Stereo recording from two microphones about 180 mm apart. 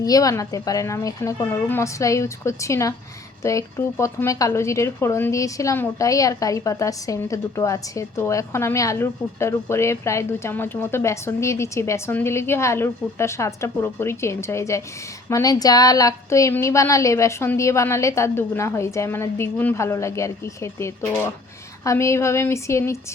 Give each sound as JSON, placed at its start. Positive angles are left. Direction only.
{"t": 0.0, "sound": "speech", "side_deg": 20}